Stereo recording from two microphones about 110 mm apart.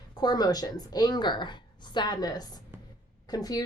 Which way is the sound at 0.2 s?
35° left (ahead or behind).